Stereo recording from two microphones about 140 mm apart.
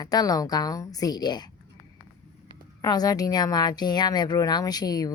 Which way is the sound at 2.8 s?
25° left (ahead or behind).